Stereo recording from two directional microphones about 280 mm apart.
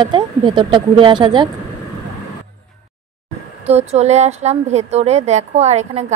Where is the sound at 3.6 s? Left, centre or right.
Right.